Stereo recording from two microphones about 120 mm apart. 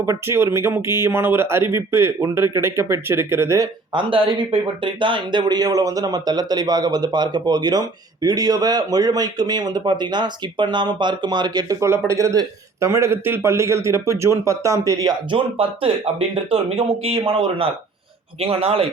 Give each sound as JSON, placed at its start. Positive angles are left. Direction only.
{"t": 0.0, "sound": "speech", "side_deg": -25}
{"t": 3.9, "sound": "speech", "side_deg": -45}
{"t": 15.3, "sound": "speech", "side_deg": -50}